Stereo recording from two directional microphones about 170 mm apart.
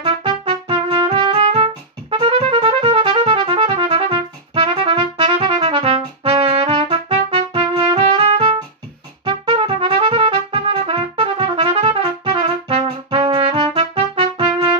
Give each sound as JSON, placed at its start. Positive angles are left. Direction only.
{"t": 0.0, "sound": "music", "side_deg": -30}
{"t": 9.2, "sound": "trumpet", "side_deg": -30}